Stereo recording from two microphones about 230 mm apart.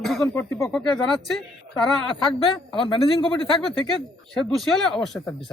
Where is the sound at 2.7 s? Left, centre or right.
Left.